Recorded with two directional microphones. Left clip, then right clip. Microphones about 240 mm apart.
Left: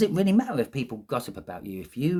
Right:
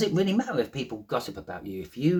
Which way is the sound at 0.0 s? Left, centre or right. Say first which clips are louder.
Left 2 dB; left.